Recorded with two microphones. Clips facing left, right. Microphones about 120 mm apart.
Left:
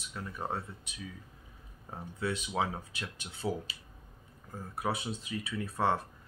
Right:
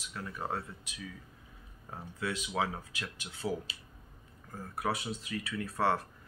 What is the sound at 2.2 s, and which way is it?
Speech, 25° left (ahead or behind).